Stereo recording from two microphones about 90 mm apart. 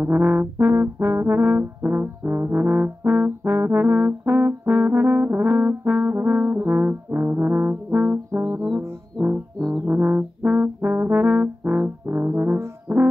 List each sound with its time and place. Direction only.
0.0 s brass instrument: 20° right (ahead or behind)
8.5 s music: centre (ahead or behind)
9.8 s brass instrument: 20° right (ahead or behind)